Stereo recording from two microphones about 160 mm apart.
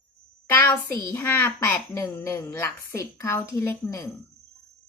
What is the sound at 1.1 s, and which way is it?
A woman's voice, 10° left (ahead or behind).